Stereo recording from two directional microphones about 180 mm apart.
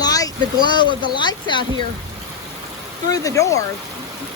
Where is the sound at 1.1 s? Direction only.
25° left (ahead or behind).